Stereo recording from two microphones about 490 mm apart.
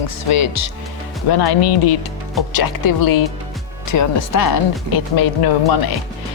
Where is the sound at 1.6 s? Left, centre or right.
Left.